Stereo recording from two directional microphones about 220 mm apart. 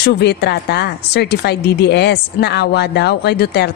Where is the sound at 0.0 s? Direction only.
50° left (ahead or behind).